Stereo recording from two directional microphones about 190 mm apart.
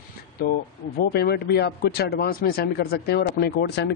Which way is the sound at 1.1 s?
55° left (ahead or behind).